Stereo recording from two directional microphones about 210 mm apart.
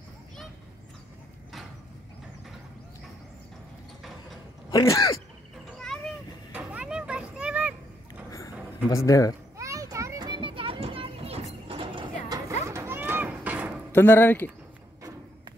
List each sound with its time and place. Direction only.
4.6 s speech: 15° left (ahead or behind)
5.7 s children playing: centre (ahead or behind)
8.9 s speech: 15° left (ahead or behind)
9.6 s children playing: 15° right (ahead or behind)
13.9 s speech: 10° left (ahead or behind)